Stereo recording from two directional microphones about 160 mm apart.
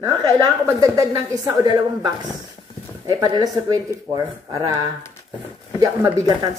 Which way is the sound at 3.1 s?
20° right (ahead or behind).